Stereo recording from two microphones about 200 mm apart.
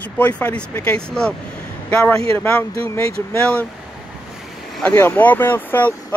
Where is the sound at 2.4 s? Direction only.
15° left (ahead or behind).